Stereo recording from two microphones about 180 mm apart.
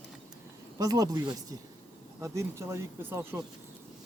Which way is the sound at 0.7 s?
20° right (ahead or behind).